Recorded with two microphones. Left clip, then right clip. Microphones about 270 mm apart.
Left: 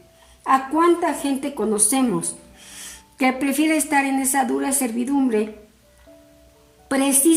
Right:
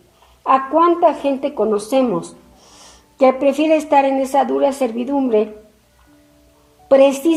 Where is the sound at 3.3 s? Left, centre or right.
Left.